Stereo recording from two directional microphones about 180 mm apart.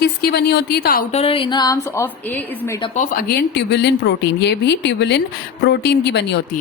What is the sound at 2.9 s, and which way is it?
Speech, 45° left (ahead or behind).